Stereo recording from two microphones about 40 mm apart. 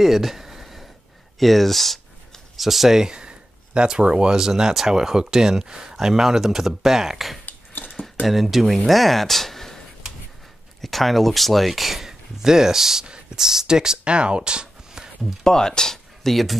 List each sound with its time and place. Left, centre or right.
0.0 s a sound: centre
1.4 s speech: centre
7.4 s a sound: left
8.3 s speech: centre
10.8 s speech: centre
15.4 s speech: centre